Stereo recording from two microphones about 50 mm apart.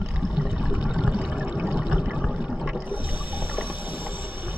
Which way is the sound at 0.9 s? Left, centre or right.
Right.